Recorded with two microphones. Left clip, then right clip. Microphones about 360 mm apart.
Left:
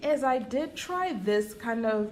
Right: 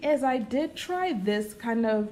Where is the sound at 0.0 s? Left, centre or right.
Centre.